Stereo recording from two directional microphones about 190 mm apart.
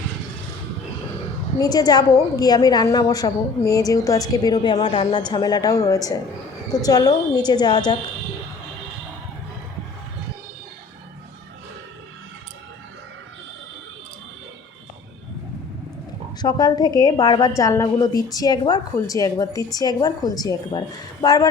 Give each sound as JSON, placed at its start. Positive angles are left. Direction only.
{"t": 1.5, "sound": "a woman's voice", "side_deg": 20}
{"t": 16.4, "sound": "a woman's voice", "side_deg": 20}